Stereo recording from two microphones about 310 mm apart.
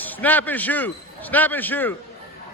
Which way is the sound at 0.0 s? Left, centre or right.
Centre.